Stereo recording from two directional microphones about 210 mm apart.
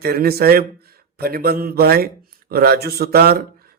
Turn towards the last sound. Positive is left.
turn(degrees=-45)  # may be behind; listen again after turning